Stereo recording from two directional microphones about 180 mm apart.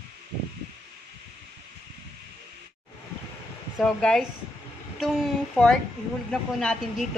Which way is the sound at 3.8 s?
5° left (ahead or behind).